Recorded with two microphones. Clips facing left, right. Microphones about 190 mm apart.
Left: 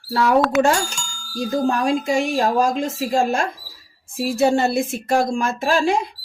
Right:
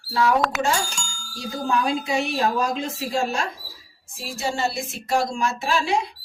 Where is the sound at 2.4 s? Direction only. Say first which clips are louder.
Left 4 dB; 45° left (ahead or behind).